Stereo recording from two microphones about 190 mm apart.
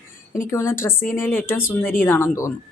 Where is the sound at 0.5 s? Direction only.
10° left (ahead or behind).